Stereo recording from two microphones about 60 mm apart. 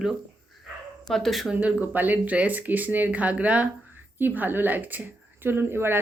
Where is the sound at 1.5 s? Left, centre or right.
Right.